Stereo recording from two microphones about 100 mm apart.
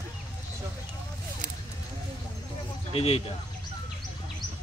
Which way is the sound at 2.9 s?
80° left.